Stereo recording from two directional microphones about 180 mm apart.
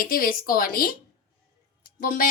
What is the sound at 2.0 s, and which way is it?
Speech, 50° left (ahead or behind).